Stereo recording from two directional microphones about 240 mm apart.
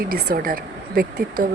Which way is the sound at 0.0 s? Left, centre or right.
Right.